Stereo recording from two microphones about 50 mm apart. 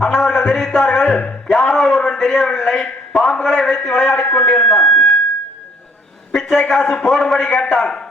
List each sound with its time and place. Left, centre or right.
0.0 s a man's voice: centre
1.5 s speech: centre
2.0 s a sound: centre
2.5 s a man's voice: centre
6.5 s a man's voice: centre